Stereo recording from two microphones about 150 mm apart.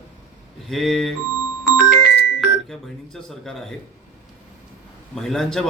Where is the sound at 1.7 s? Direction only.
60° right (ahead or behind).